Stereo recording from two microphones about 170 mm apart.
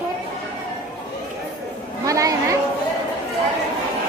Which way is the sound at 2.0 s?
20° right (ahead or behind).